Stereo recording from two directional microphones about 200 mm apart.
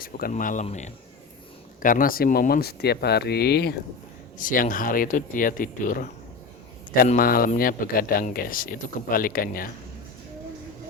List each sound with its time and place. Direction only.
0.0 s speech: 45° left (ahead or behind)
4.4 s speech: 45° left (ahead or behind)
7.2 s speech: 45° left (ahead or behind)